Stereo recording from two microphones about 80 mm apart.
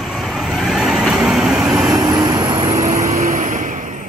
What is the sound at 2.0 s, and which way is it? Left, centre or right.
Vehicle, right.